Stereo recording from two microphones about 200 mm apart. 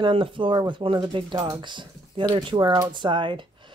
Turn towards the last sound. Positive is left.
turn(degrees=-25)  # may be behind; listen again after turning